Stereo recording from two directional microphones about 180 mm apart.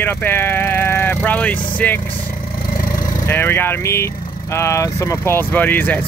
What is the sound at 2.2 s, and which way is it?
Vehicle, 50° left (ahead or behind).